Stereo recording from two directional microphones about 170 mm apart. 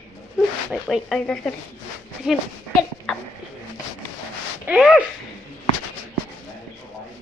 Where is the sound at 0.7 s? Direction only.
Centre (ahead or behind).